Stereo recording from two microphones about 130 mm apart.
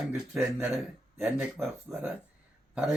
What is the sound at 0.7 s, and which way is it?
Speech, centre (ahead or behind).